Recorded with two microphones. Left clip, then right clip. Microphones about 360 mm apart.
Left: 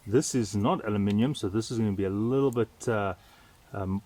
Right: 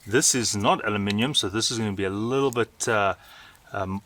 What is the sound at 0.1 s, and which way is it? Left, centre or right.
Speech, right.